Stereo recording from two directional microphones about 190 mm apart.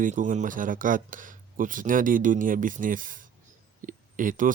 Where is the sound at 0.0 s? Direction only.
45° right (ahead or behind).